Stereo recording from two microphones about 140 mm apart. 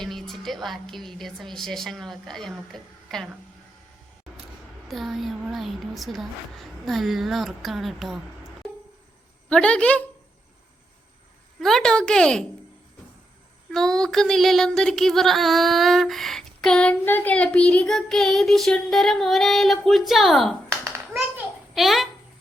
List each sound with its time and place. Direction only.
0.0 s child singing: centre (ahead or behind)
4.9 s child singing: centre (ahead or behind)
9.5 s a woman's voice: 10° left (ahead or behind)
11.6 s child singing: 5° left (ahead or behind)
13.7 s child singing: 5° left (ahead or behind)
20.8 s hands: 20° right (ahead or behind)
21.2 s a sound: 5° right (ahead or behind)